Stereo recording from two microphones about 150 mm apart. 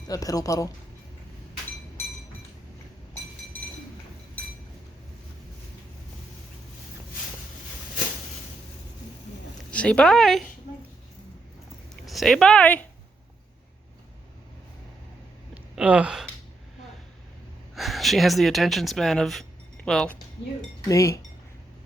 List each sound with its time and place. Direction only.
0.1 s speech: 25° left (ahead or behind)
9.7 s a woman's voice: 10° left (ahead or behind)
12.0 s speech: centre (ahead or behind)
15.7 s speech: 10° right (ahead or behind)
17.7 s speech: centre (ahead or behind)
20.8 s speech: 20° left (ahead or behind)